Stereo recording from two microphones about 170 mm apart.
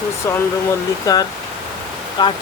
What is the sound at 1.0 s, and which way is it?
Speech, 20° left (ahead or behind).